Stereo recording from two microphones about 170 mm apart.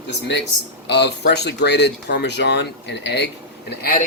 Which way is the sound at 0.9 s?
85° left.